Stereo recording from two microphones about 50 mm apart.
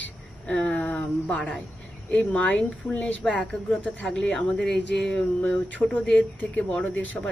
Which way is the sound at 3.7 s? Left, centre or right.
Centre.